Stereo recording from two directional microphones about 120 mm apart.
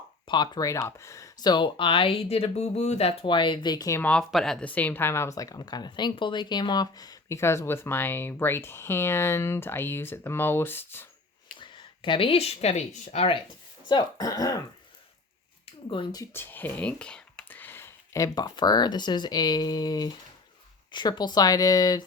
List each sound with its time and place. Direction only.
0.3 s speech: 40° left (ahead or behind)
4.0 s speech: 5° left (ahead or behind)
11.5 s speech: 45° left (ahead or behind)
13.8 s speech: 35° left (ahead or behind)
15.6 s a sound: 45° left (ahead or behind)
16.3 s speech: 20° left (ahead or behind)